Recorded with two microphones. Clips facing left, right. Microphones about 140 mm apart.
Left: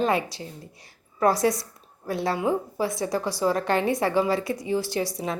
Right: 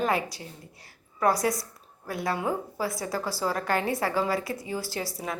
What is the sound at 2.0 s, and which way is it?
A woman's voice, 25° left (ahead or behind).